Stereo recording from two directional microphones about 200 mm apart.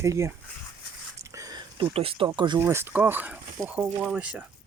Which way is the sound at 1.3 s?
15° right (ahead or behind).